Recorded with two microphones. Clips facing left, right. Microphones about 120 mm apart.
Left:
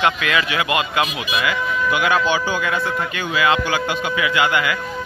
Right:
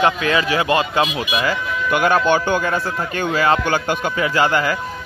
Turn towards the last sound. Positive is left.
turn(degrees=-40)  # may be behind; listen again after turning